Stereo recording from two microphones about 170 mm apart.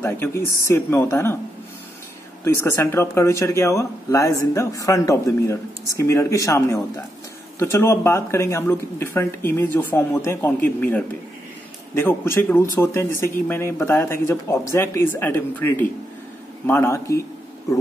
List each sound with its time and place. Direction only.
0.0 s speech: 15° left (ahead or behind)
2.4 s speech: 15° left (ahead or behind)